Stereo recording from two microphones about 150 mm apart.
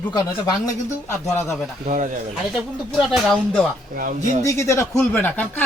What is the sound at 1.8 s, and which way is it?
Speech, 60° right (ahead or behind).